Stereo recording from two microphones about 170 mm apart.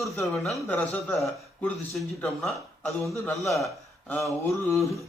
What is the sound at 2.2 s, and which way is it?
A man's voice, centre (ahead or behind).